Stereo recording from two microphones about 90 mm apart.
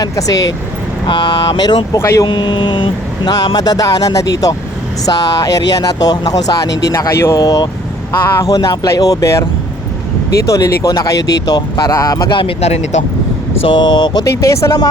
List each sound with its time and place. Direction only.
0.0 s speech: 45° left (ahead or behind)
1.0 s speech: 60° left (ahead or behind)
2.0 s speech: 30° left (ahead or behind)
2.2 s speech: 60° left (ahead or behind); by 7.3 s 35° left (ahead or behind)
7.3 s speech: 45° left (ahead or behind)
12.3 s speech: 75° left (ahead or behind)
13.6 s speech: 70° left (ahead or behind); by 14.3 s 50° left (ahead or behind)
14.3 s speech: 35° left (ahead or behind)